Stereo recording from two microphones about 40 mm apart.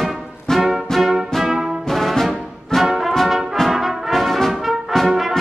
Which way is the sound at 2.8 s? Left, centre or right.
Centre.